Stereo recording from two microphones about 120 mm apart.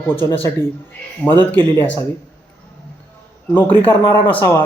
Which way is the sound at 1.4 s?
20° left (ahead or behind).